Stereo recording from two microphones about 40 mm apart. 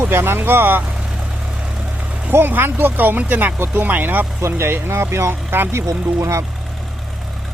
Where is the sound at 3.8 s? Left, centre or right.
Right.